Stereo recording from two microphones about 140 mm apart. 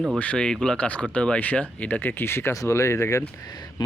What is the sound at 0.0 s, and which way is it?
Speech, 5° left (ahead or behind).